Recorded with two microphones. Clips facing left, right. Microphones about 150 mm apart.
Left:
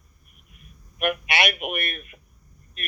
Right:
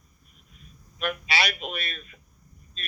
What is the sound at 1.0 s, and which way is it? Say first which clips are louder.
A man's voice: left 4 dB; 60° left (ahead or behind).